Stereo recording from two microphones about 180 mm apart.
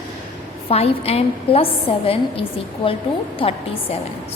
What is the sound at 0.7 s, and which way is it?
A woman's voice, 35° left (ahead or behind).